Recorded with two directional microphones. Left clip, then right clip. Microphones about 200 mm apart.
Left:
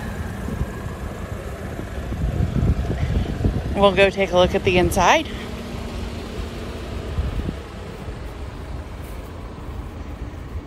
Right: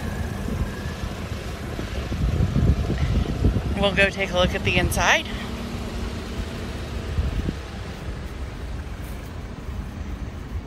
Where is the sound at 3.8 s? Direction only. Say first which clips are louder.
Left 5 dB; 40° left (ahead or behind).